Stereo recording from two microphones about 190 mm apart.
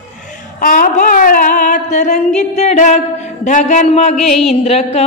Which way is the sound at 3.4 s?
40° left (ahead or behind).